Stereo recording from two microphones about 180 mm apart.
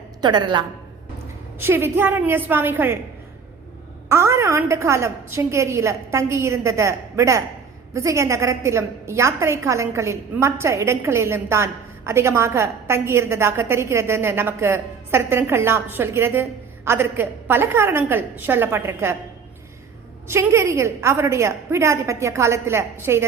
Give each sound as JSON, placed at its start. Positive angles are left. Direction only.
{"t": 0.2, "sound": "a woman's voice", "side_deg": -25}
{"t": 1.5, "sound": "a woman's voice", "side_deg": -10}
{"t": 4.1, "sound": "a woman's voice", "side_deg": -15}
{"t": 20.2, "sound": "a woman's voice", "side_deg": -15}